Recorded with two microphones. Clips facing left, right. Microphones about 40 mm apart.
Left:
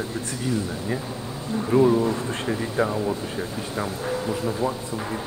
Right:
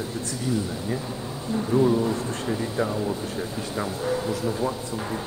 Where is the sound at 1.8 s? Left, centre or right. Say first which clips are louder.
Left 2 dB; centre.